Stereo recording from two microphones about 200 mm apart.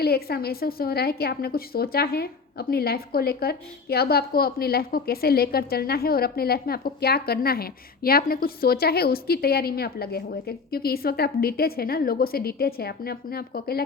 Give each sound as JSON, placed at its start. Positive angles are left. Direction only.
{"t": 0.0, "sound": "a woman's voice", "side_deg": 50}